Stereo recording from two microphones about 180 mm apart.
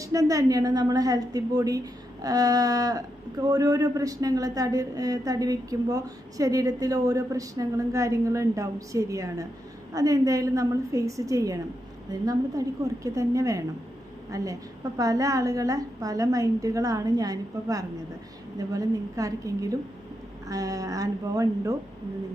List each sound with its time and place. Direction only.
0.0 s a woman's voice: 20° right (ahead or behind)